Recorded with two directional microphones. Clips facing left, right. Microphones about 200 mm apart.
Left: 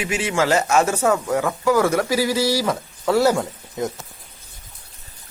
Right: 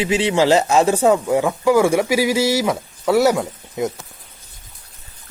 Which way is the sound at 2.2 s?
25° right (ahead or behind).